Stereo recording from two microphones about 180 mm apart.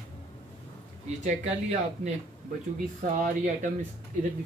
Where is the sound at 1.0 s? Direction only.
40° right (ahead or behind).